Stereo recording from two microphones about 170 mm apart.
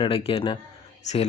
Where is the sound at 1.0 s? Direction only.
40° left (ahead or behind).